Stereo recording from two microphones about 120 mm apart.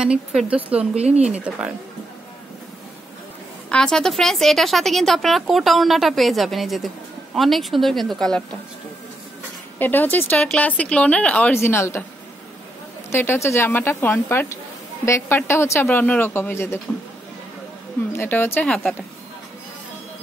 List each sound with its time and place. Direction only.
0.0 s speech: 5° right (ahead or behind)
3.7 s a woman's voice: 5° left (ahead or behind)
9.8 s speech: 15° left (ahead or behind)
11.5 s speech: 20° left (ahead or behind)
13.1 s speech: 20° left (ahead or behind)
18.1 s speech: 20° left (ahead or behind)